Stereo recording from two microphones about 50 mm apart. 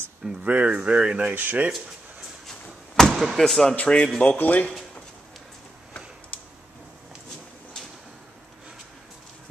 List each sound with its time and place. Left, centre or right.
0.4 s speech: right
3.1 s speech: centre
3.7 s speech: left